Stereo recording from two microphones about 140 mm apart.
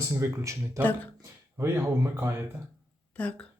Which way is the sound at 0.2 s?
20° right (ahead or behind).